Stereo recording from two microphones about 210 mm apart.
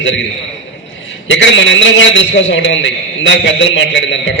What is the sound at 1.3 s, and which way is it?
A man's voice, 60° left (ahead or behind).